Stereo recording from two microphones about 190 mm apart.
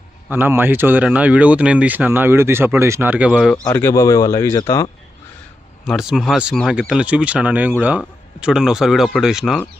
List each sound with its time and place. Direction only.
0.3 s speech: 10° right (ahead or behind)
3.3 s speech: 5° left (ahead or behind)
5.8 s speech: centre (ahead or behind)